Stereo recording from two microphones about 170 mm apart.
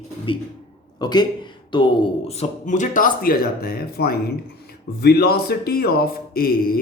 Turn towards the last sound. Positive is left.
turn(degrees=60)  # may be behind; listen again after turning